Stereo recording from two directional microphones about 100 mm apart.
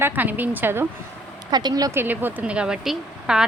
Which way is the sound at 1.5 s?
45° right (ahead or behind).